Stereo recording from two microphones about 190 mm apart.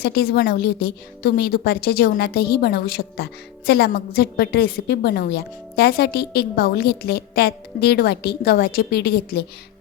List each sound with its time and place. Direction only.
0.0 s a woman's voice: 55° left (ahead or behind)